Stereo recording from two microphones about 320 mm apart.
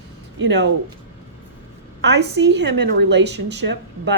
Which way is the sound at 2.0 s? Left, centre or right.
Right.